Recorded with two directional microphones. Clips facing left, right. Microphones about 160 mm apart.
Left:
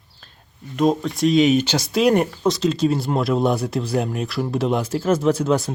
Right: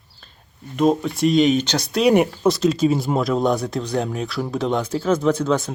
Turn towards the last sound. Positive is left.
turn(degrees=5)  # may be behind; listen again after turning